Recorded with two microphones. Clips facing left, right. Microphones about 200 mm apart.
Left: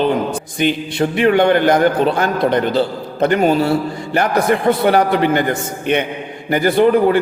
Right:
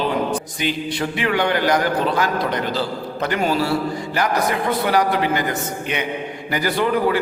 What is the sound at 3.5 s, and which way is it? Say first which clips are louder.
Speech: left 6 dB; 25° left (ahead or behind).